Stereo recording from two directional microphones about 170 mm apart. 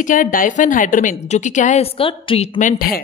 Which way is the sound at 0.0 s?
50° left (ahead or behind).